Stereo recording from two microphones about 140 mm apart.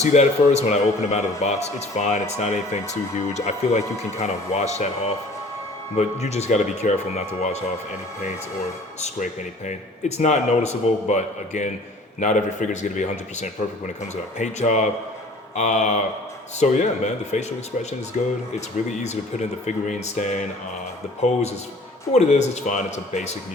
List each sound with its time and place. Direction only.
0.1 s speech: 55° left (ahead or behind)
6.2 s speech: 50° left (ahead or behind)
9.0 s speech: 60° left (ahead or behind)